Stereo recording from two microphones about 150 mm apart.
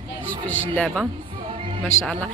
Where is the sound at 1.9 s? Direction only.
50° left (ahead or behind).